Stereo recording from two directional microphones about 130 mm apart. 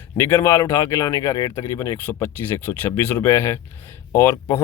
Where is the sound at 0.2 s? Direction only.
25° left (ahead or behind).